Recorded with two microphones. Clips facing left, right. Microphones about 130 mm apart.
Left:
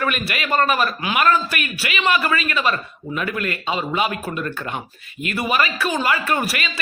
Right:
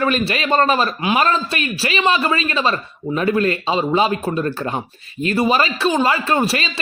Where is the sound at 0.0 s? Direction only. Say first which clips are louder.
Right 5 dB; 30° right (ahead or behind).